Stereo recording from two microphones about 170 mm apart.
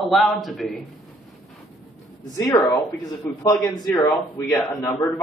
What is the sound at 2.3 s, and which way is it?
Speech, 20° left (ahead or behind).